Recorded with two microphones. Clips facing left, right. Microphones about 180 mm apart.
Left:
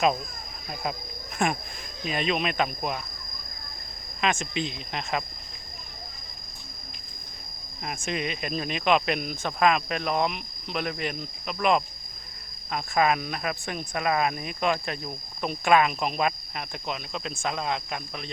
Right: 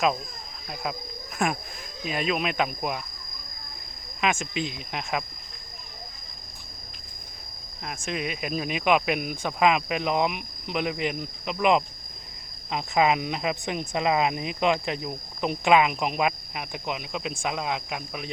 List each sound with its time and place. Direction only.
0.7 s speech: centre (ahead or behind)
4.2 s speech: 10° right (ahead or behind)
7.9 s speech: centre (ahead or behind)